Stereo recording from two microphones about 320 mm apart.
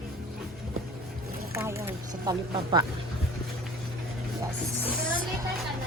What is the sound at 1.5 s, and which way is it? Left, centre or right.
Speech, centre.